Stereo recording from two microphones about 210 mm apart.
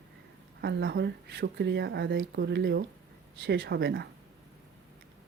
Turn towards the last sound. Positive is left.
turn(degrees=-50)  # may be behind; listen again after turning